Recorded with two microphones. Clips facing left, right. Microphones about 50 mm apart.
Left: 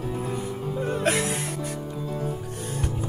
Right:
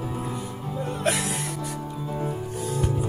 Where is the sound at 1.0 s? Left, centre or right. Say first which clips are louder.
Even; left.